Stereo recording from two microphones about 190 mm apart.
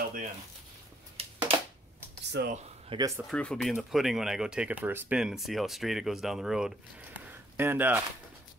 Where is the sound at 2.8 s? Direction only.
20° right (ahead or behind).